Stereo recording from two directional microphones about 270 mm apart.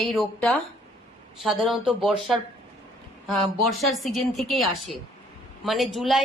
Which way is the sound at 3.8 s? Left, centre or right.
Centre.